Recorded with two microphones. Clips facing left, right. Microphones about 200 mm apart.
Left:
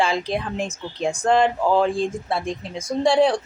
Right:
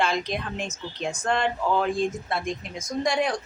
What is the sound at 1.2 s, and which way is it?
Speech, 90° left.